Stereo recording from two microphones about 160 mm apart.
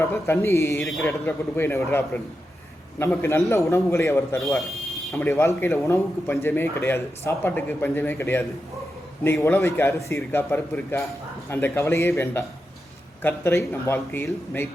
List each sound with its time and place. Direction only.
0.0 s a man's voice: 15° left (ahead or behind)